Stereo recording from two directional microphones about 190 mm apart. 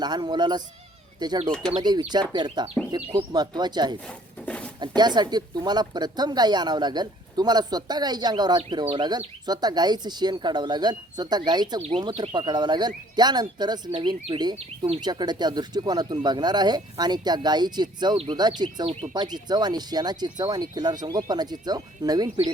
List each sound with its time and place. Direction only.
0.0 s speech: 25° right (ahead or behind)
4.0 s a sound: 5° left (ahead or behind)
4.8 s speech: 20° right (ahead or behind)